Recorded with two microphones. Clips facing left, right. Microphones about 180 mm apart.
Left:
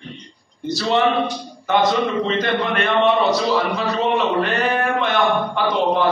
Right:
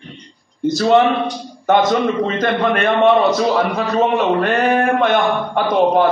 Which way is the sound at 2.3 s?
50° right (ahead or behind).